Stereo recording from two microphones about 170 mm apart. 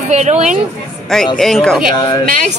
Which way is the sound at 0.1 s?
40° right (ahead or behind).